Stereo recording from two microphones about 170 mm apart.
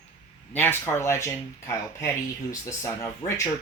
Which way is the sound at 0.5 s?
10° left (ahead or behind).